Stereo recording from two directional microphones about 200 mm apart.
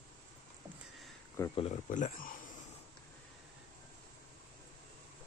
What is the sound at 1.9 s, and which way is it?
Speech, 40° left (ahead or behind).